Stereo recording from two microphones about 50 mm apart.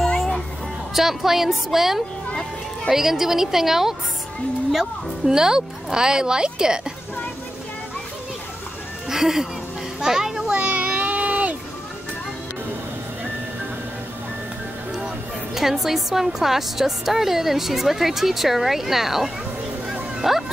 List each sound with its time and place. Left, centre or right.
0.9 s speech: centre
9.1 s speech: centre
9.9 s children playing: centre
10.5 s a child's voice: right
10.8 s a sound: right
15.5 s a woman's voice: centre
19.9 s music: centre